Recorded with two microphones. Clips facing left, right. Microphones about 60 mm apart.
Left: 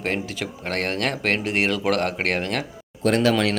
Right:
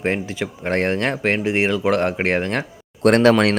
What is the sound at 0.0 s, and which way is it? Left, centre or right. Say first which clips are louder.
Speech: right 4 dB; right.